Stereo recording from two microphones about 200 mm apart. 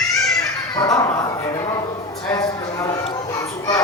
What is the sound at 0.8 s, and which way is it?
Dog, 15° left (ahead or behind).